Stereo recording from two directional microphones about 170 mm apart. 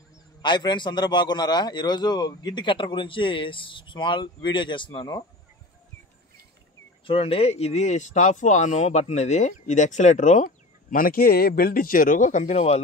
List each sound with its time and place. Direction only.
0.4 s a man's voice: 25° left (ahead or behind)
7.1 s speech: 35° left (ahead or behind)